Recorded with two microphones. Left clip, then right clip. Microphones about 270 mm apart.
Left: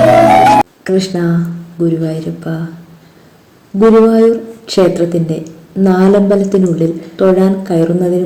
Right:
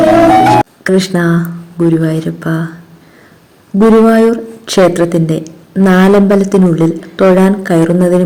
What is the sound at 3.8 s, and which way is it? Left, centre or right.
Speech, right.